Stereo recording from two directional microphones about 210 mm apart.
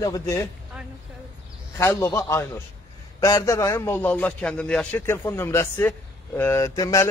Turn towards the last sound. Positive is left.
turn(degrees=15)  # may be behind; listen again after turning